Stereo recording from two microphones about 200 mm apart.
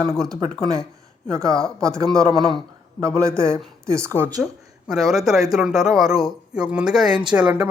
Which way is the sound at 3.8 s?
15° right (ahead or behind).